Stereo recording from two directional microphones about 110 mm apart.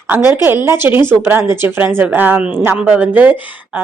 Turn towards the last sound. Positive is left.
turn(degrees=-15)  # may be behind; listen again after turning